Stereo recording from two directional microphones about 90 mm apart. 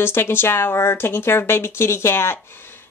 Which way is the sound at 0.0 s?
25° left (ahead or behind).